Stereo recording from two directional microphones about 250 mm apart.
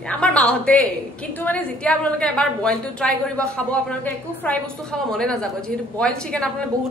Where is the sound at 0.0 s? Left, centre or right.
Centre.